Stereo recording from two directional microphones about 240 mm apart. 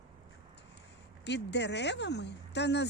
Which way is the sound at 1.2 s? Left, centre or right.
Left.